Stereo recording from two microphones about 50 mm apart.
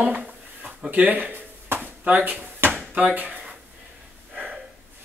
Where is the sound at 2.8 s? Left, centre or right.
Right.